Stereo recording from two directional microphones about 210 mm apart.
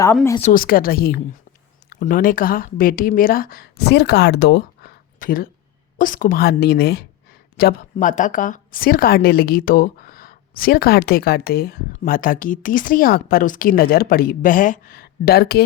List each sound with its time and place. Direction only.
0.5 s speech: 45° left (ahead or behind)